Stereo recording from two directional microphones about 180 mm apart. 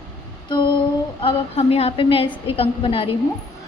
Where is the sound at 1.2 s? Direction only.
30° left (ahead or behind).